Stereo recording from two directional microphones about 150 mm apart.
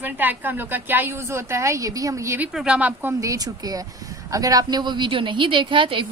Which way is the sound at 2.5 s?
5° right (ahead or behind).